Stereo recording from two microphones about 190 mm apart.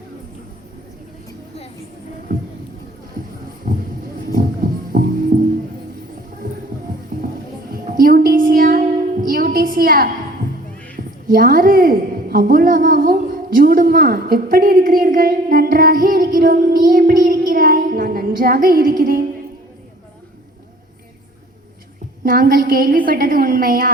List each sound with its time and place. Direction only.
3.6 s a sound: 45° right (ahead or behind)
4.4 s music: 45° right (ahead or behind)
7.7 s child singing: 50° right (ahead or behind)
11.3 s a woman's voice: 45° right (ahead or behind)
22.2 s a woman's voice: 45° right (ahead or behind)